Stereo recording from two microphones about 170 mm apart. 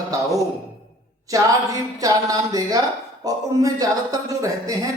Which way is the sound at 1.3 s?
20° right (ahead or behind).